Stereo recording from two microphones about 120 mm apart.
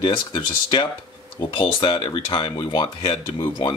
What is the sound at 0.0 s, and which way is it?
Speech, 35° left (ahead or behind).